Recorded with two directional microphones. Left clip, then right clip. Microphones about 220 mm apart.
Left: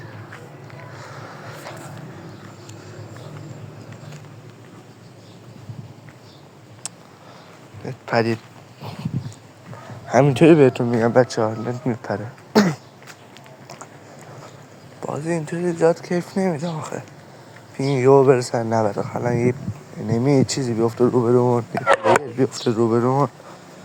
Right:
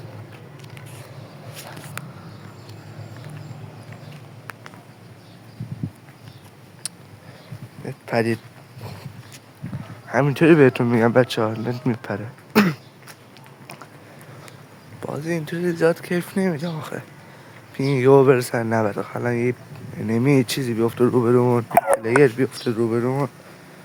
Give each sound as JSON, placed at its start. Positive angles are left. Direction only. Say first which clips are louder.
{"t": 7.9, "sound": "speech", "louder": "left 2 dB", "side_deg": -5}
{"t": 8.8, "sound": "dog", "louder": "left 3 dB", "side_deg": -10}
{"t": 10.2, "sound": "speech", "louder": "even", "side_deg": 5}
{"t": 10.8, "sound": "speech", "louder": "even", "side_deg": -15}
{"t": 12.0, "sound": "a sound", "louder": "left 3 dB", "side_deg": -5}
{"t": 15.0, "sound": "speech", "louder": "left 2 dB", "side_deg": -5}
{"t": 22.2, "sound": "speech", "louder": "right 5 dB", "side_deg": 0}